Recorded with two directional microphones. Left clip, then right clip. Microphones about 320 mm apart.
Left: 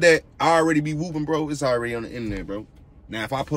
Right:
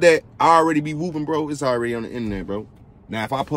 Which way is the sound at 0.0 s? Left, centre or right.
Centre.